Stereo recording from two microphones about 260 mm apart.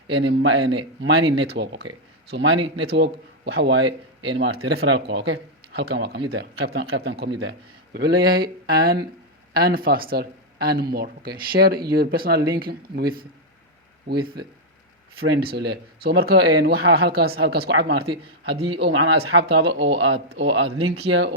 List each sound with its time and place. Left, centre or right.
0.1 s speech: right